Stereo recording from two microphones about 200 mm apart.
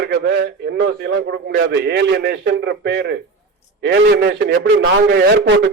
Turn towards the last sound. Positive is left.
turn(degrees=-60)  # may be behind; listen again after turning